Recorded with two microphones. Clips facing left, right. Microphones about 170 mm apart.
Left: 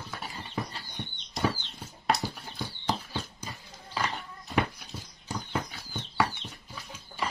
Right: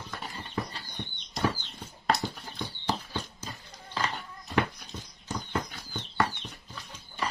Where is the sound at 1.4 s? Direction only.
Centre (ahead or behind).